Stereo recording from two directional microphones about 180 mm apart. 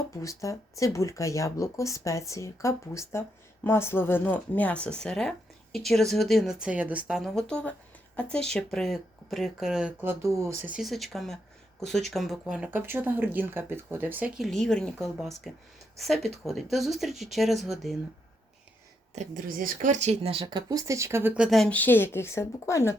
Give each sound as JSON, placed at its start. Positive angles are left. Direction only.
{"t": 0.2, "sound": "a woman's voice", "side_deg": 15}
{"t": 19.1, "sound": "speech", "side_deg": -45}